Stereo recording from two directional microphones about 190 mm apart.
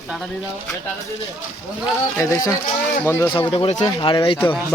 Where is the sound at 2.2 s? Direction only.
15° left (ahead or behind).